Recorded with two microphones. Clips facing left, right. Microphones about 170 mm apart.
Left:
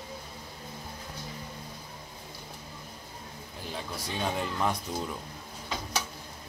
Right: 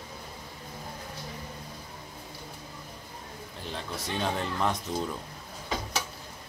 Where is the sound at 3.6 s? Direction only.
5° left (ahead or behind).